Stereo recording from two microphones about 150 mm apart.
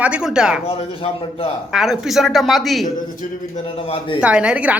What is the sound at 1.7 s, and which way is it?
A woman's voice, centre (ahead or behind).